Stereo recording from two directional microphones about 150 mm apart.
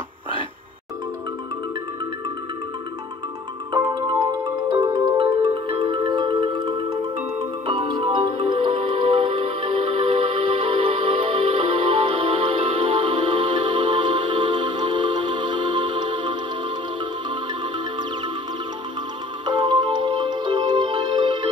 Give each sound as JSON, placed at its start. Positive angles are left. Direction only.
{"t": 4.7, "sound": "marimba", "side_deg": -25}
{"t": 7.6, "sound": "music", "side_deg": -35}
{"t": 19.4, "sound": "music", "side_deg": -30}